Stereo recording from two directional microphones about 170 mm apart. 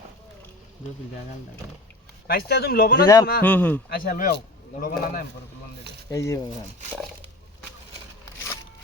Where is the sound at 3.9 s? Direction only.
55° left (ahead or behind).